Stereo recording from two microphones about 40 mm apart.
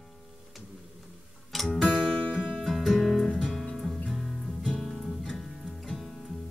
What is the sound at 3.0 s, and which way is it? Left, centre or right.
Music, centre.